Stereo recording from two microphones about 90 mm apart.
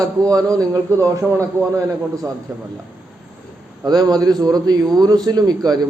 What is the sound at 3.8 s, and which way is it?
A man's voice, 45° right (ahead or behind).